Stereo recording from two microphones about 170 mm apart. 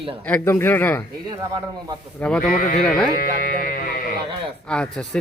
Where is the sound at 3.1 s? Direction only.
60° left (ahead or behind).